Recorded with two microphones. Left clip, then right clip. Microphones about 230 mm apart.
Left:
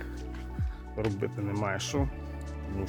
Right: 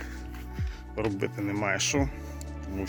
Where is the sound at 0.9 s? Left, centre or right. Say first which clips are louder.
Right 2 dB; centre.